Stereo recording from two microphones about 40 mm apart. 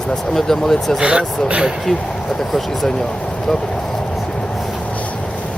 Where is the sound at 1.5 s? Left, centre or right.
Right.